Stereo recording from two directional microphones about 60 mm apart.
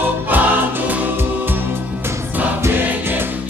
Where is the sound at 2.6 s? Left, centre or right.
Right.